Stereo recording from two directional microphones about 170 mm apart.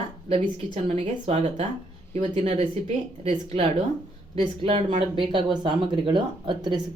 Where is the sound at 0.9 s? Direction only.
40° right (ahead or behind).